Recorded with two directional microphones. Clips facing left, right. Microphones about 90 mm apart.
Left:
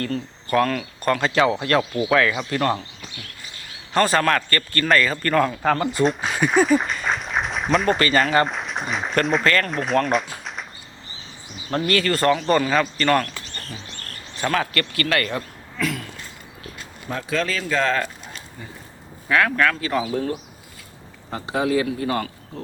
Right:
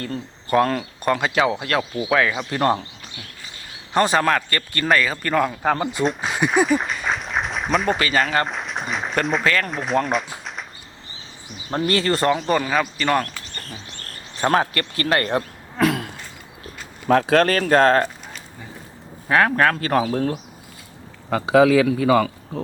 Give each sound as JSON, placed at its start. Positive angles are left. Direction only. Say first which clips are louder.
{"t": 0.0, "sound": "speech", "louder": "left 3 dB", "side_deg": -15}
{"t": 0.6, "sound": "speech", "louder": "right 1 dB", "side_deg": -25}
{"t": 1.0, "sound": "speech", "louder": "left 1 dB", "side_deg": -15}
{"t": 2.5, "sound": "speech", "louder": "right 2 dB", "side_deg": -30}
{"t": 3.9, "sound": "speech", "louder": "right 1 dB", "side_deg": -15}
{"t": 6.0, "sound": "speech", "louder": "left 1 dB", "side_deg": 0}
{"t": 11.7, "sound": "speech", "louder": "right 1 dB", "side_deg": -20}
{"t": 12.5, "sound": "speech", "louder": "left 1 dB", "side_deg": -10}
{"t": 14.4, "sound": "speech", "louder": "right 4 dB", "side_deg": -35}
{"t": 14.7, "sound": "speech", "louder": "even", "side_deg": -20}
{"t": 15.3, "sound": "a sound", "louder": "right 5 dB", "side_deg": -55}
{"t": 17.1, "sound": "speech", "louder": "right 9 dB", "side_deg": -75}
{"t": 19.3, "sound": "speech", "louder": "right 2 dB", "side_deg": -35}
{"t": 21.2, "sound": "a man's voice", "louder": "right 8 dB", "side_deg": -90}